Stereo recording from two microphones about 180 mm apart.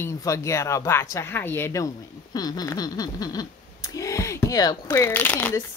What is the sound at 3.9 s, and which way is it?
Speech, 15° left (ahead or behind).